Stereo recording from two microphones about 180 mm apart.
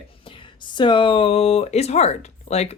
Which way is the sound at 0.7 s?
25° left (ahead or behind).